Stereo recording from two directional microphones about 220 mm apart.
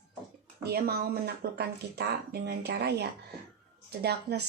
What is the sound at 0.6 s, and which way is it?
Speech, 45° right (ahead or behind).